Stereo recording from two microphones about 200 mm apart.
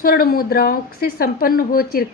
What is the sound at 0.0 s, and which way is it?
A woman's voice, 45° left (ahead or behind).